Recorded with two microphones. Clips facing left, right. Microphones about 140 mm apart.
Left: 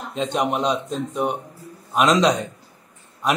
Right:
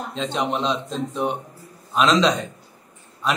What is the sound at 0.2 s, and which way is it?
Speech, 50° left (ahead or behind).